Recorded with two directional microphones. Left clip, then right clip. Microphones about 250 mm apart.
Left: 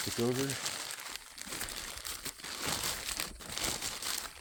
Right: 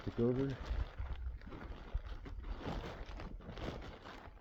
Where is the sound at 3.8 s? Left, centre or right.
Centre.